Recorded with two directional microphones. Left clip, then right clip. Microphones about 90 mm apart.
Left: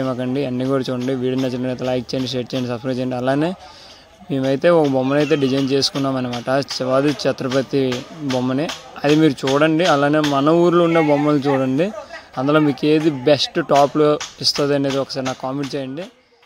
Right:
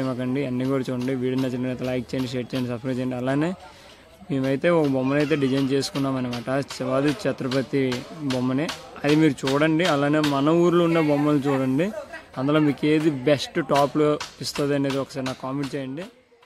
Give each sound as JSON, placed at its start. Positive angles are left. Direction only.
{"t": 0.2, "sound": "speech", "side_deg": 25}
{"t": 2.0, "sound": "speech", "side_deg": 20}